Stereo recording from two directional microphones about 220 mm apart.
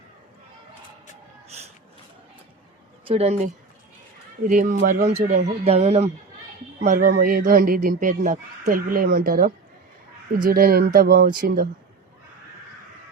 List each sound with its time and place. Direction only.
3.1 s speech: 30° right (ahead or behind)